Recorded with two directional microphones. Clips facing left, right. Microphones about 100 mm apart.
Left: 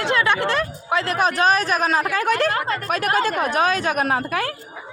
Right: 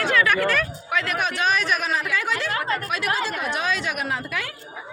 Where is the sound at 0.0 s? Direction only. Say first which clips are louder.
Left 1 dB; 25° left (ahead or behind); by 4.5 s 40° left (ahead or behind).